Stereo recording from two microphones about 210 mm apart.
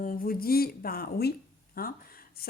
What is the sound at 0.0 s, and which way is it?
A woman's voice, 40° left (ahead or behind).